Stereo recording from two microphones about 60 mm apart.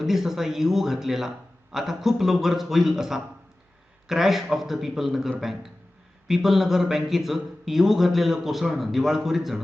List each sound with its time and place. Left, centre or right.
0.0 s speech: centre